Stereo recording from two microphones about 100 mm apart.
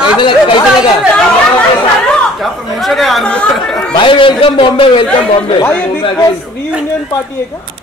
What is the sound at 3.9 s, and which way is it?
A man's voice, 55° left (ahead or behind).